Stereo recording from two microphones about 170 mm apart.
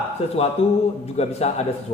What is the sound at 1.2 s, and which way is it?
Speech, 40° left (ahead or behind).